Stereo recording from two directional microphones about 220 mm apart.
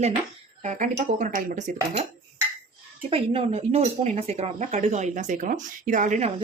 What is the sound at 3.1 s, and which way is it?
Speech, 25° right (ahead or behind).